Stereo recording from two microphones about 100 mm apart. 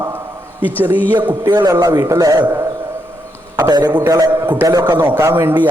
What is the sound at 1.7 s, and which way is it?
Speech, 35° right (ahead or behind).